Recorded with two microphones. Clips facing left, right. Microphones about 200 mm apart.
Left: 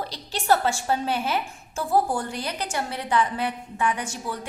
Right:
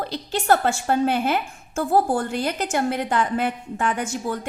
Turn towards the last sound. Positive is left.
turn(degrees=-50)  # may be behind; listen again after turning